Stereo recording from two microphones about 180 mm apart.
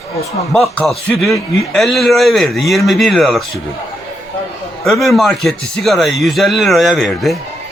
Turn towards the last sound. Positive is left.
turn(degrees=0)  # may be behind; listen again after turning